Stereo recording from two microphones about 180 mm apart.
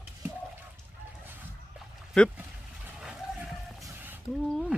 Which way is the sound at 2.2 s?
5° left (ahead or behind).